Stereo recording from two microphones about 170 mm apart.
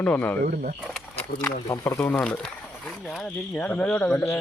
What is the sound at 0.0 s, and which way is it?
Speech, 10° left (ahead or behind).